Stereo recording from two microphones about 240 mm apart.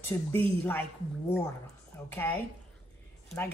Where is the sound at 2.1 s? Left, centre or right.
Centre.